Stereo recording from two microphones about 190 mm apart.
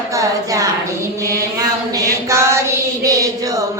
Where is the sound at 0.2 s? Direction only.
15° right (ahead or behind).